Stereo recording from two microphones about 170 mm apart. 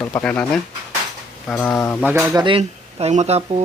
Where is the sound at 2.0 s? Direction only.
15° right (ahead or behind).